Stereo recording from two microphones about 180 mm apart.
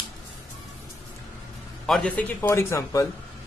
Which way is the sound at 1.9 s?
5° left (ahead or behind).